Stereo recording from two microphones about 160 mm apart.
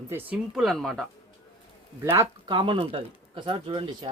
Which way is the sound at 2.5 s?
30° right (ahead or behind).